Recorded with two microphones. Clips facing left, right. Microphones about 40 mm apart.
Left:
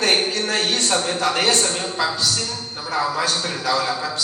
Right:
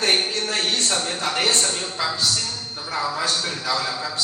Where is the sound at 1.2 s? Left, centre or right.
Left.